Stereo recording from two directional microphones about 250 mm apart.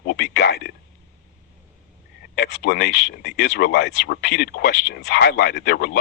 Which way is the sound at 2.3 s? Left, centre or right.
Left.